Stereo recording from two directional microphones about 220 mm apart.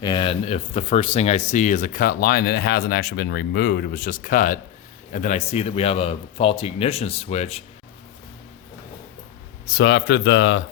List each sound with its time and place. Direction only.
0.0 s speech: 20° left (ahead or behind)
9.6 s speech: 50° left (ahead or behind)